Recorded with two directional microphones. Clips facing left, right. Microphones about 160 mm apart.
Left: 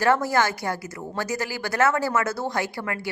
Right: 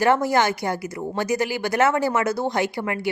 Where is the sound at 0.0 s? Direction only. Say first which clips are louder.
Right 2 dB; 20° right (ahead or behind).